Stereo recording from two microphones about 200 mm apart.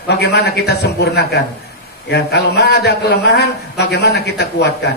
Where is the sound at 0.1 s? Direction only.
60° left (ahead or behind).